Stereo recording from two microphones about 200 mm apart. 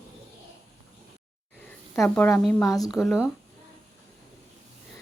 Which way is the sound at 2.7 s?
20° left (ahead or behind).